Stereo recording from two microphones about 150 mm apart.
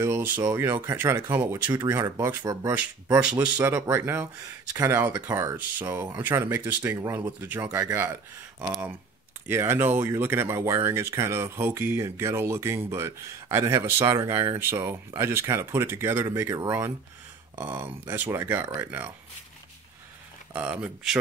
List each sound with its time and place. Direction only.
0.0 s speech: 15° right (ahead or behind)
4.9 s speech: 10° right (ahead or behind)
8.1 s speech: 25° right (ahead or behind)
20.5 s speech: 10° right (ahead or behind)